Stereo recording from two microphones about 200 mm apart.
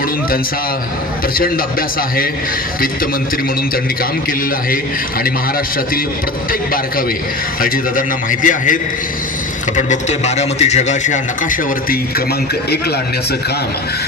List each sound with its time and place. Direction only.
1.4 s a man's voice: 45° left (ahead or behind)
7.6 s a man's voice: 40° left (ahead or behind)